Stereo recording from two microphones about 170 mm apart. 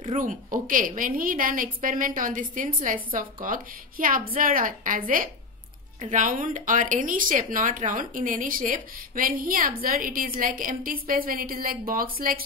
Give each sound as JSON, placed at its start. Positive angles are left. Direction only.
{"t": 0.2, "sound": "a woman's voice", "side_deg": -50}
{"t": 5.9, "sound": "speech", "side_deg": -45}